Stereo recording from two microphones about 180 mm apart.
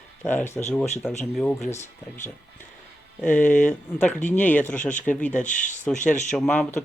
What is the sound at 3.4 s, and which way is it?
Speech, 45° left (ahead or behind).